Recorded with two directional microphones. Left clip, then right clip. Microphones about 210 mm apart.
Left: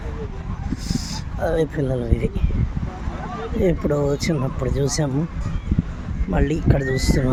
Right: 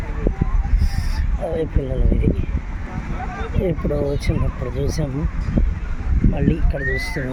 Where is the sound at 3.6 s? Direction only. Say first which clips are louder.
Left 2 dB; 15° left (ahead or behind).